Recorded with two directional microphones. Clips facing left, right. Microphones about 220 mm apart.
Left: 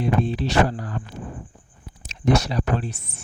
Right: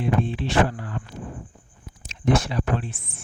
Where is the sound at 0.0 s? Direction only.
40° left (ahead or behind).